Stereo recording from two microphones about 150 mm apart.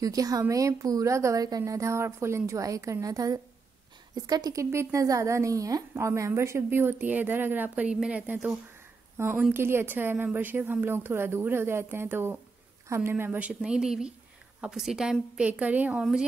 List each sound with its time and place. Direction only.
0.0 s a woman's voice: 25° right (ahead or behind); by 16.3 s 5° right (ahead or behind)